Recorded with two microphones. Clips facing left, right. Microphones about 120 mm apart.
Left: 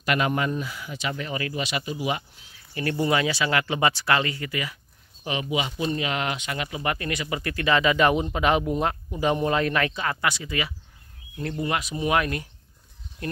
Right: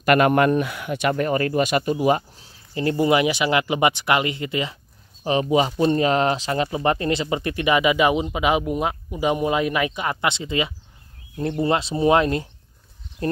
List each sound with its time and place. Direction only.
0.0 s speech: 55° right (ahead or behind); by 2.6 s 35° right (ahead or behind)
2.7 s speech: 25° right (ahead or behind)
5.2 s speech: 35° right (ahead or behind)